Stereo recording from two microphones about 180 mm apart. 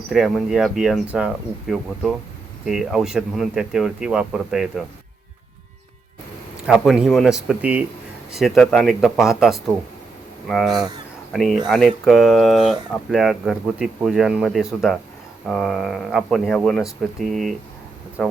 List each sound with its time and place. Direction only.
0.1 s speech: centre (ahead or behind)
6.7 s speech: 5° right (ahead or behind)
10.7 s speech: 20° right (ahead or behind)
11.3 s speech: centre (ahead or behind)